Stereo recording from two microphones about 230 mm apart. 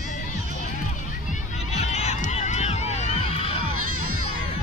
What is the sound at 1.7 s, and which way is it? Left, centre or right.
Music, left.